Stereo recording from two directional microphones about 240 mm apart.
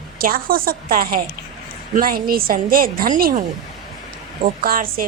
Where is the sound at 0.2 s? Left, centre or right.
Right.